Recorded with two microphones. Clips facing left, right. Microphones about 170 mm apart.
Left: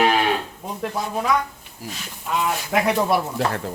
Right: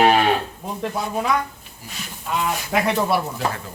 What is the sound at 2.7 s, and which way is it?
Speech, 10° left (ahead or behind).